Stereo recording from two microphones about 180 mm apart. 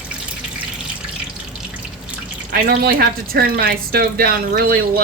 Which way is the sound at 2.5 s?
55° right (ahead or behind).